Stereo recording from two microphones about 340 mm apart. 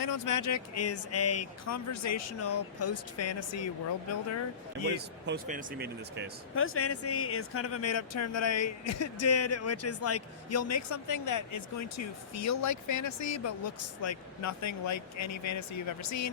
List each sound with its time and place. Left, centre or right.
0.0 s speech: left
4.9 s speech: right
6.6 s speech: left